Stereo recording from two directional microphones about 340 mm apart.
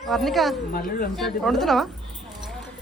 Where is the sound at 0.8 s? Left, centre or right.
Left.